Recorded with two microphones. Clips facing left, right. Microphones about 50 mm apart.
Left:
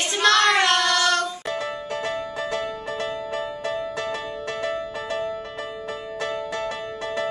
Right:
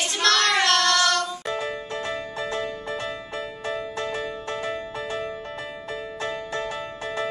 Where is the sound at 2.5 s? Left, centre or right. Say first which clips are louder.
Left 1 dB; left.